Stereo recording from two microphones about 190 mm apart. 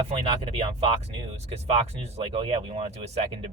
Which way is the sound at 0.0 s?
30° right (ahead or behind).